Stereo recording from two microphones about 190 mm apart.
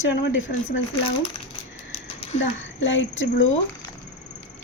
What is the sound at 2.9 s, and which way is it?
Speech, 75° left (ahead or behind).